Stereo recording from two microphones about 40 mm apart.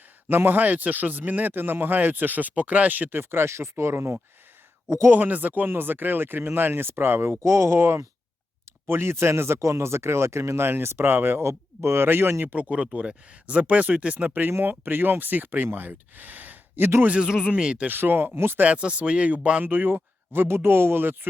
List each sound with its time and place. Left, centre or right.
0.3 s speech: right
0.6 s speech: right
2.0 s speech: right
5.1 s speech: right
5.6 s speech: right
12.7 s speech: right
14.7 s speech: right
17.2 s speech: centre
17.8 s speech: right
18.6 s speech: right
19.6 s speech: right